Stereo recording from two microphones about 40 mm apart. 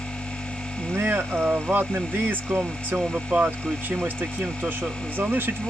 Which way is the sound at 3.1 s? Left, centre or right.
Right.